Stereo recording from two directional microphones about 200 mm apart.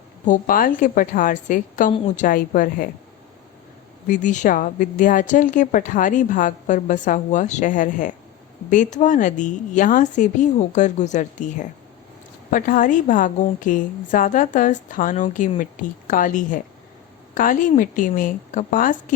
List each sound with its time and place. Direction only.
0.3 s a woman's voice: 45° left (ahead or behind)
4.0 s a woman's voice: 40° left (ahead or behind)